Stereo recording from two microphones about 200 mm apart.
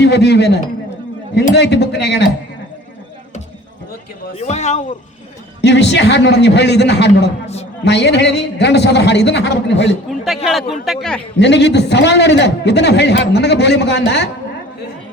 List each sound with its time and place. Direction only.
0.0 s a man's voice: 55° left (ahead or behind)
4.4 s a man's voice: 35° left (ahead or behind)
5.6 s a man's voice: 60° left (ahead or behind)
7.4 s a man's voice: 30° left (ahead or behind)
7.9 s a man's voice: 60° left (ahead or behind)
10.1 s speech: centre (ahead or behind)
11.3 s a man's voice: 60° left (ahead or behind)